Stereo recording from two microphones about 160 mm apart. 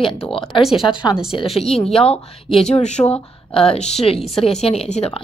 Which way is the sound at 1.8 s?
Centre (ahead or behind).